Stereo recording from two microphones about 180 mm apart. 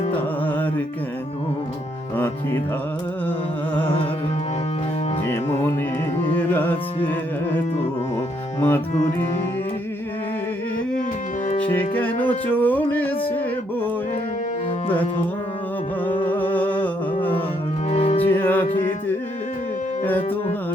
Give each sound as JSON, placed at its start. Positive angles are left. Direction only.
{"t": 2.1, "sound": "music", "side_deg": 10}
{"t": 6.5, "sound": "carnatic music", "side_deg": 10}
{"t": 8.6, "sound": "music", "side_deg": 10}
{"t": 11.6, "sound": "music", "side_deg": 10}
{"t": 16.0, "sound": "music", "side_deg": 10}
{"t": 17.9, "sound": "music", "side_deg": 35}
{"t": 18.3, "sound": "music", "side_deg": 10}